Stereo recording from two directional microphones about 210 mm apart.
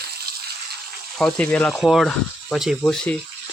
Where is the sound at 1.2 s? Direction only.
5° left (ahead or behind).